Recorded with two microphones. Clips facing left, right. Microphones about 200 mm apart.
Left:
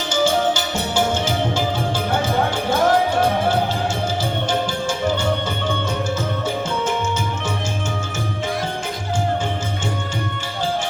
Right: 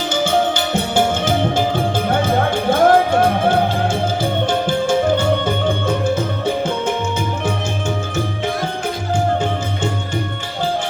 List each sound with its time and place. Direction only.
0.1 s music: 55° right (ahead or behind)